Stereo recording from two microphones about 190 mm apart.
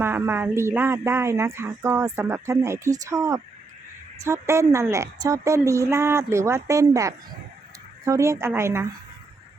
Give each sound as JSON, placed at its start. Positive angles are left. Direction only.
{"t": 0.0, "sound": "a woman's voice", "side_deg": -10}